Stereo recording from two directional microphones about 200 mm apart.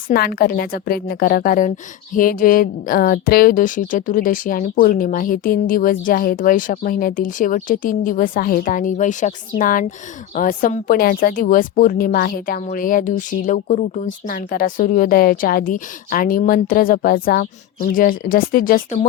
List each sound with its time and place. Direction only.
0.1 s a woman's voice: 45° left (ahead or behind)